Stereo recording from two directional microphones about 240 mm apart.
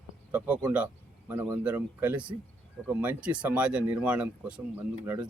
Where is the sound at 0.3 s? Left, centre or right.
Centre.